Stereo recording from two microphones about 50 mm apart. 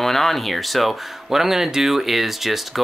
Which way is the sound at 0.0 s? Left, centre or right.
Centre.